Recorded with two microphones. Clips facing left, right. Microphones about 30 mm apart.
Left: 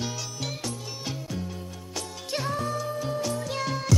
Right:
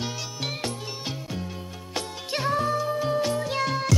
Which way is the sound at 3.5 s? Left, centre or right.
Centre.